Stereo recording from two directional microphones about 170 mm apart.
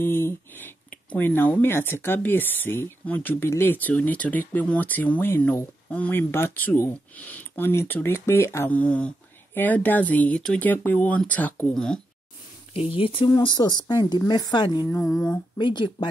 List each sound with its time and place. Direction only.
0.0 s speech: 10° left (ahead or behind)
12.7 s a woman's voice: 30° left (ahead or behind)
15.0 s a sound: centre (ahead or behind)
15.5 s a woman's voice: 25° left (ahead or behind)